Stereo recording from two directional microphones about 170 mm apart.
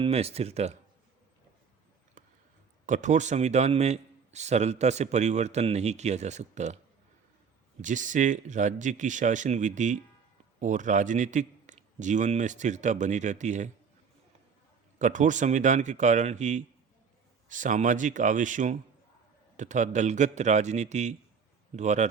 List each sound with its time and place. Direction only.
0.0 s a man's voice: 35° right (ahead or behind)
2.2 s a sound: 50° right (ahead or behind)
2.8 s a man's voice: 45° right (ahead or behind)
7.8 s a man's voice: 45° right (ahead or behind)
14.9 s a man's voice: 45° right (ahead or behind)